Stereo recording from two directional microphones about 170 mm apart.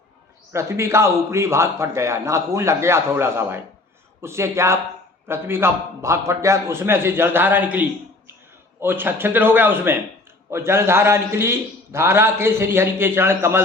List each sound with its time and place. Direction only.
0.5 s a man's voice: 15° right (ahead or behind)